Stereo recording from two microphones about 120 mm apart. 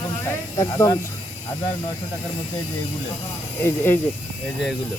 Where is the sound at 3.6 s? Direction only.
20° left (ahead or behind).